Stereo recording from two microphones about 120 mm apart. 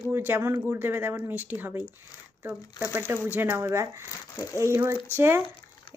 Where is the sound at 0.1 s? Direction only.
15° right (ahead or behind).